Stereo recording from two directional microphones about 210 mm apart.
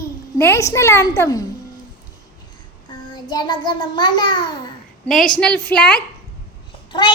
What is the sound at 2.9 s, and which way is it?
Child singing, 20° left (ahead or behind).